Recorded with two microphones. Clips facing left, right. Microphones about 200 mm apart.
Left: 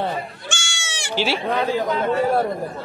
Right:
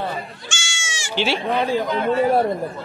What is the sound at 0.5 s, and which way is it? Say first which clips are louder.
Goat: left 1 dB; 60° left (ahead or behind).